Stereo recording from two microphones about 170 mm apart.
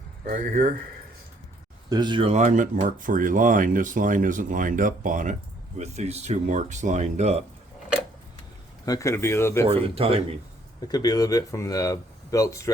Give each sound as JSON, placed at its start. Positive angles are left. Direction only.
{"t": 0.3, "sound": "speech", "side_deg": -50}
{"t": 1.9, "sound": "speech", "side_deg": -25}
{"t": 2.3, "sound": "speech", "side_deg": -45}
{"t": 8.9, "sound": "speech", "side_deg": 20}
{"t": 9.6, "sound": "speech", "side_deg": -35}
{"t": 10.8, "sound": "speech", "side_deg": 25}